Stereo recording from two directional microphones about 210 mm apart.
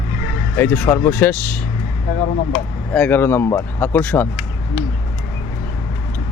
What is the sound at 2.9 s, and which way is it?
Speech, 5° left (ahead or behind).